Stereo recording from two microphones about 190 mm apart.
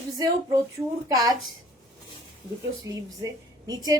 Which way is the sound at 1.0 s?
20° right (ahead or behind).